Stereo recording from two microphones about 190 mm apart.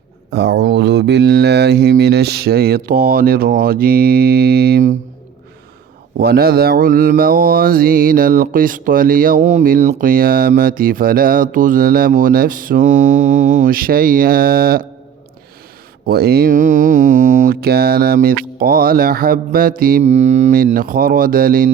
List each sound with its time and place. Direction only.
0.3 s speech: 60° right (ahead or behind)
1.3 s mantra: 60° right (ahead or behind)
6.1 s mantra: 55° right (ahead or behind)
16.0 s mantra: 55° right (ahead or behind)